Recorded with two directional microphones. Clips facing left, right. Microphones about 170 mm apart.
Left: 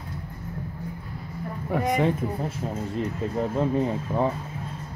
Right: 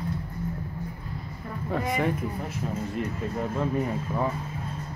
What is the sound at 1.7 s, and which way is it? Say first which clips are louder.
Speech: left 4 dB; 20° left (ahead or behind).